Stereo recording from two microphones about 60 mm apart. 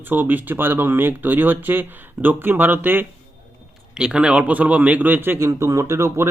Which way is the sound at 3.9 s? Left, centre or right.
Centre.